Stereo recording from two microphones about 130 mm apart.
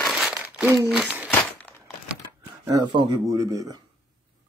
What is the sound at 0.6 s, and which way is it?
Speech, 20° right (ahead or behind).